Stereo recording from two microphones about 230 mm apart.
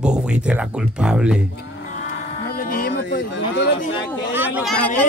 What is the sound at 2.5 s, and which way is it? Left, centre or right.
Speech, left.